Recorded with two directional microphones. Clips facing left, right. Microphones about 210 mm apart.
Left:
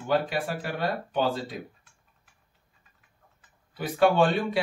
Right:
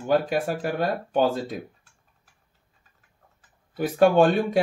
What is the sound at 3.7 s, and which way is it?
Speech, 45° right (ahead or behind).